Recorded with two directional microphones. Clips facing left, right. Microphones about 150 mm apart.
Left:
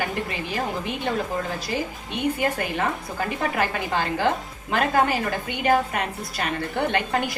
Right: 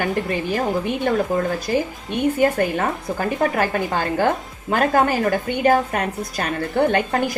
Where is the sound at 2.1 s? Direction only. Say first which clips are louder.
Right 6 dB; 50° right (ahead or behind).